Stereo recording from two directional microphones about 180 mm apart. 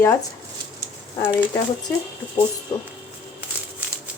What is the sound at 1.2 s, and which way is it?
Speech, 15° left (ahead or behind).